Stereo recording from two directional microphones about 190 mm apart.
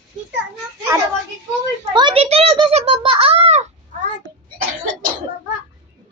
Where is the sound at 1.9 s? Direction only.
25° right (ahead or behind).